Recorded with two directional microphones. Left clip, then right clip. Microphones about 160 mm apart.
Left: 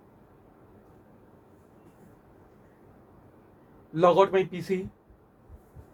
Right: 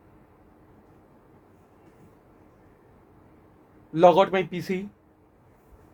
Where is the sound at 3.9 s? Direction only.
90° right.